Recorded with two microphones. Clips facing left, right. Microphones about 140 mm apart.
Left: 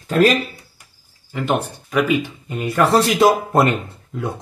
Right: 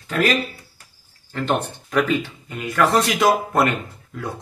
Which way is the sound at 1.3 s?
5° left (ahead or behind).